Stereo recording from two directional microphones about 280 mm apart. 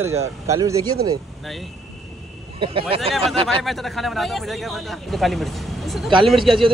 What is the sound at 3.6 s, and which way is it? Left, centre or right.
Speech, centre.